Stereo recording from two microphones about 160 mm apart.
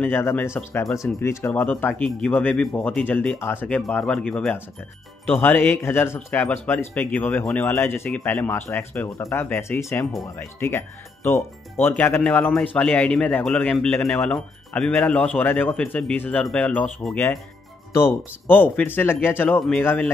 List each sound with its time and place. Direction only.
0.0 s a man's voice: 15° left (ahead or behind)